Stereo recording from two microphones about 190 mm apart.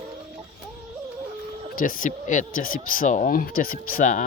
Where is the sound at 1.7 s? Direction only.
45° left (ahead or behind).